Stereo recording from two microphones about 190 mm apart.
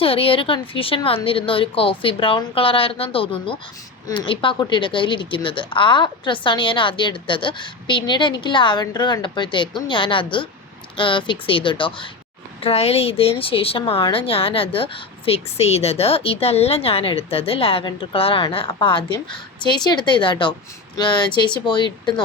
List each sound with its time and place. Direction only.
0.0 s a woman's voice: 30° left (ahead or behind)